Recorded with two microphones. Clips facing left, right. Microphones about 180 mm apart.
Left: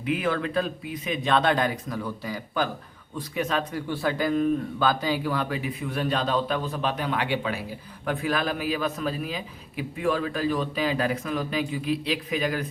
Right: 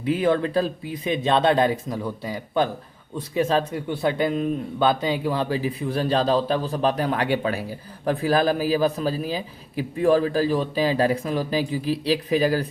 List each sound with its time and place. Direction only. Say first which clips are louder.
0.0 s a man's voice: right 5 dB; 30° right (ahead or behind)